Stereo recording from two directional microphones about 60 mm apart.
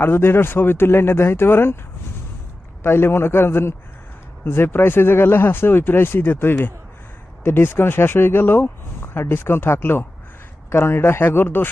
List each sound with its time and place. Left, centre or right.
0.0 s speech: left
2.8 s speech: left